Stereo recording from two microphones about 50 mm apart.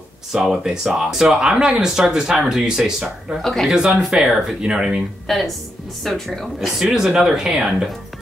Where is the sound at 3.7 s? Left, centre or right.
Centre.